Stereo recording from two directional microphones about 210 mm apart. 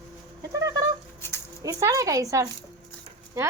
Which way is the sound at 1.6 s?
15° right (ahead or behind).